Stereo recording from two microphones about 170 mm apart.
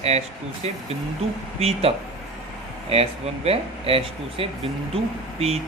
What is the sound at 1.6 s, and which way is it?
Speech, 35° right (ahead or behind).